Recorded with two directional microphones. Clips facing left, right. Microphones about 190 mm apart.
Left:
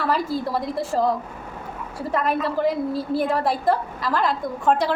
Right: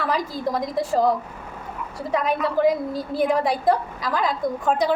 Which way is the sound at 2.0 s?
Centre (ahead or behind).